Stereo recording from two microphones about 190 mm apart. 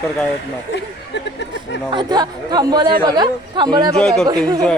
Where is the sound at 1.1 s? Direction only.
70° left (ahead or behind).